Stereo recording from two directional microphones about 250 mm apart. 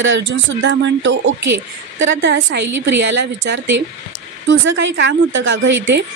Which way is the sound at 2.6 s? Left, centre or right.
Right.